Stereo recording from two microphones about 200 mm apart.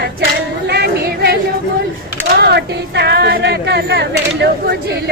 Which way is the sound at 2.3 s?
55° right (ahead or behind).